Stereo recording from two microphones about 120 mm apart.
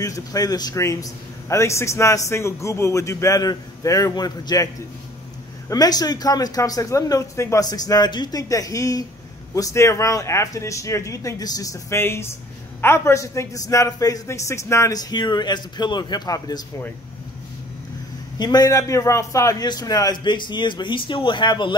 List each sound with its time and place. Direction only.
0.0 s a man's voice: 30° left (ahead or behind)
5.7 s a man's voice: 30° left (ahead or behind)
18.4 s a man's voice: 35° left (ahead or behind)